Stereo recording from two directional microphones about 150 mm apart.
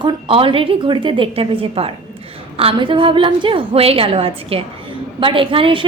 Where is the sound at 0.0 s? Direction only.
35° right (ahead or behind).